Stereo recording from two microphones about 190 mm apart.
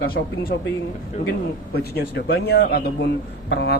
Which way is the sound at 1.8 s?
55° left (ahead or behind).